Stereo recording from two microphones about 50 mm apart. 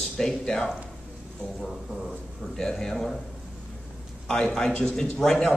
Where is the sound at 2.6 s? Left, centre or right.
Centre.